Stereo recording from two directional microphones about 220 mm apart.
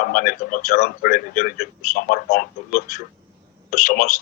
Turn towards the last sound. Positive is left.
turn(degrees=40)  # may be behind; listen again after turning